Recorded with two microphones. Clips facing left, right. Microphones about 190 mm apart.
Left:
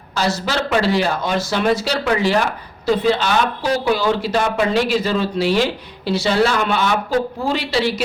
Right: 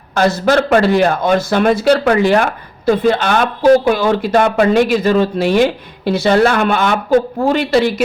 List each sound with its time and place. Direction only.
0.1 s a man's voice: 55° right (ahead or behind)